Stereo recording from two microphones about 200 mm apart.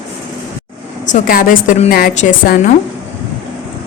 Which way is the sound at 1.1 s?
45° left (ahead or behind).